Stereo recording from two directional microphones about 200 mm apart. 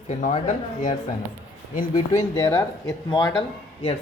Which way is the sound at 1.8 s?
20° left (ahead or behind).